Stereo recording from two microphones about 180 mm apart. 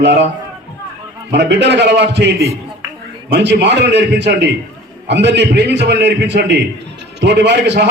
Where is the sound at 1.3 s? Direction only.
75° right (ahead or behind).